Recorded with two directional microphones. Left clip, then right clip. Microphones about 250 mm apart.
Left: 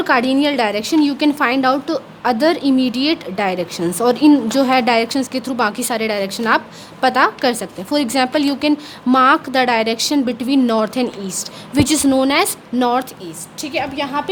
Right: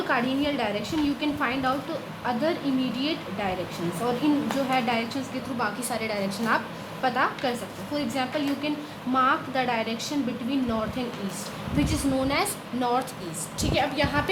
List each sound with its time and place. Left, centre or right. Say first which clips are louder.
0.1 s a woman's voice: left 11 dB; left